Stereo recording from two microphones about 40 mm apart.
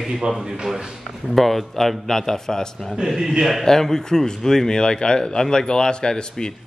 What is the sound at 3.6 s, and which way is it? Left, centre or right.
Speech, centre.